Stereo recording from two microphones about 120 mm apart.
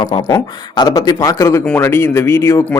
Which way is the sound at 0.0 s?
30° left (ahead or behind).